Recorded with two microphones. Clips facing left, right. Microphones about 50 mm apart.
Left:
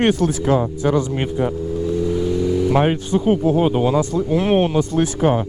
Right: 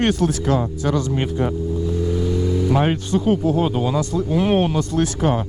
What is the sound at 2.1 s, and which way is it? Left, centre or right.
Vehicle, centre.